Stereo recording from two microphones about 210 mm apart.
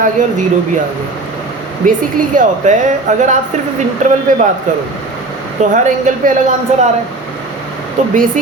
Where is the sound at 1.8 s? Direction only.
40° right (ahead or behind).